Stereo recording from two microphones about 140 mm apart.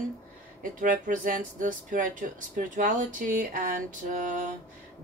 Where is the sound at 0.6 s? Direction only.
70° right (ahead or behind).